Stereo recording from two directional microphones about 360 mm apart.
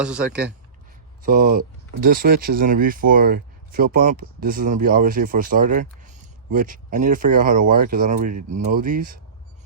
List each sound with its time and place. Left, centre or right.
1.2 s speech: right